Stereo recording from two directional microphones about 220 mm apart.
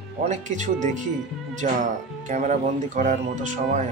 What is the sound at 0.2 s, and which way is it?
Speech, 35° right (ahead or behind).